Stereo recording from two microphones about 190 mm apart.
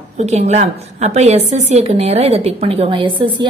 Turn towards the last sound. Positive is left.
turn(degrees=-25)  # may be behind; listen again after turning